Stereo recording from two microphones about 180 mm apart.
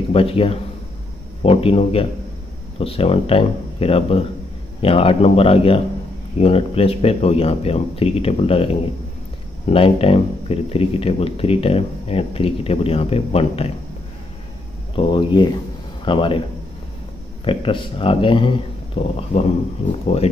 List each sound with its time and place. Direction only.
0.1 s speech: 30° left (ahead or behind)
9.7 s speech: 30° left (ahead or behind)
15.0 s speech: 30° left (ahead or behind)
17.5 s speech: 30° left (ahead or behind)